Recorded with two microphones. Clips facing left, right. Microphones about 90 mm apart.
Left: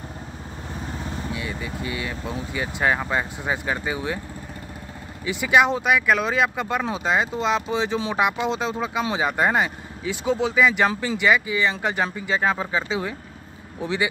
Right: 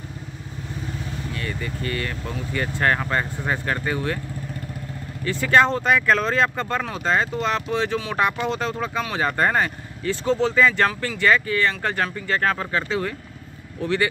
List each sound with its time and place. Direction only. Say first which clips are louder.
0.9 s vehicle: left 1 dB; 30° left (ahead or behind)
1.3 s speech: even; 10° left (ahead or behind)
5.2 s speech: right 1 dB; 10° left (ahead or behind)